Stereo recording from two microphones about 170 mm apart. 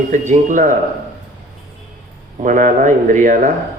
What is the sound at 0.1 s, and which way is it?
Speech, 50° right (ahead or behind).